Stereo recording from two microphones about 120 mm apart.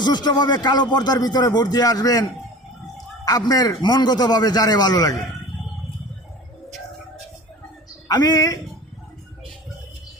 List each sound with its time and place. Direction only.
0.0 s speech: 35° left (ahead or behind)
8.0 s speech: 30° left (ahead or behind)